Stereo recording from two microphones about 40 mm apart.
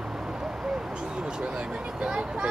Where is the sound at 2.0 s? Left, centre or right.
Right.